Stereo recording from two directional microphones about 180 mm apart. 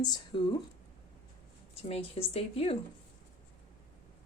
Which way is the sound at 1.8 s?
30° left (ahead or behind).